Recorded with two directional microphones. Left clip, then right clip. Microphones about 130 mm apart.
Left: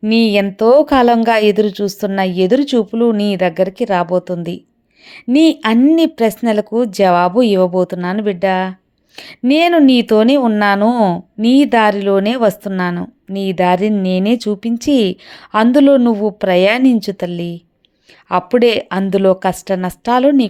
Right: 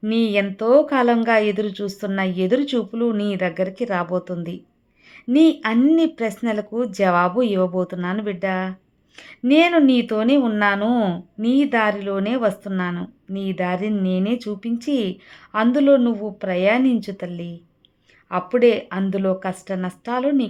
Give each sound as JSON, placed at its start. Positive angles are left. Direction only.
{"t": 0.2, "sound": "a woman's voice", "side_deg": 40}
{"t": 10.8, "sound": "speech", "side_deg": 25}
{"t": 11.3, "sound": "speech", "side_deg": 50}